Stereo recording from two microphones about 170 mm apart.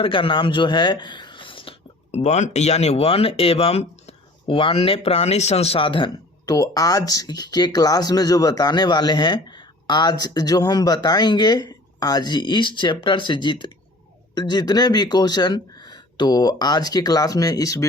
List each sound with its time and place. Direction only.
0.0 s speech: 30° left (ahead or behind)
2.1 s speech: 40° left (ahead or behind); by 17.8 s 20° left (ahead or behind)